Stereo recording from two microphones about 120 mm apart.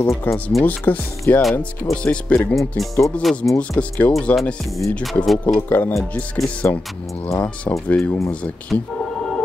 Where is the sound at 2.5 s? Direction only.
Centre (ahead or behind).